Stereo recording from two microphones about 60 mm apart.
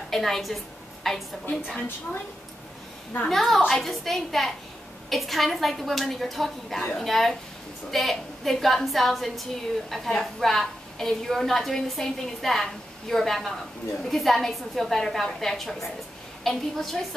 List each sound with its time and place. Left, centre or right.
0.1 s a woman's voice: centre
3.3 s a woman's voice: centre